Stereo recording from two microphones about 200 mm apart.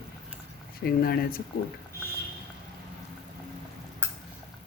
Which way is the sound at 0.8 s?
50° left (ahead or behind).